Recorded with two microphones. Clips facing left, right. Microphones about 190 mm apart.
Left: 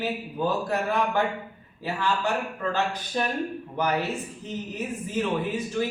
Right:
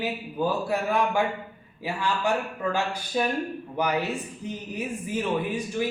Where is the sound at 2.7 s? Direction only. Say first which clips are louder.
Even; 10° right (ahead or behind).